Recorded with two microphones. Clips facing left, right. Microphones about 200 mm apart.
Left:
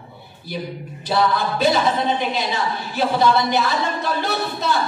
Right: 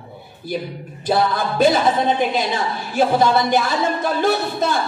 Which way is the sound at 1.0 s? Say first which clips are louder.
Right 1 dB; 50° right (ahead or behind).